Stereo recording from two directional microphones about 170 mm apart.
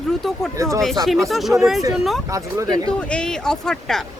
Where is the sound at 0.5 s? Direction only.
15° right (ahead or behind).